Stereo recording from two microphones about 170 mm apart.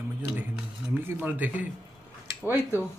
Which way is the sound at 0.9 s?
10° right (ahead or behind).